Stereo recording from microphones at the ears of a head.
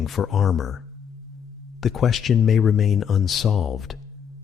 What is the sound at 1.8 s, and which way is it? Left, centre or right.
Speech, left.